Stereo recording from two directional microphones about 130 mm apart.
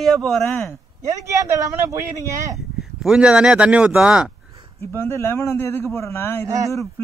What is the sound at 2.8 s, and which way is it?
Speech, 5° right (ahead or behind).